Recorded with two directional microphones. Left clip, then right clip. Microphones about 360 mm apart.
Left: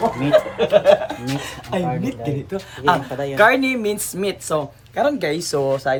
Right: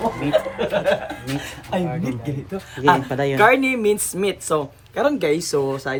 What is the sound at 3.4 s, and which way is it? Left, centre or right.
Speech, centre.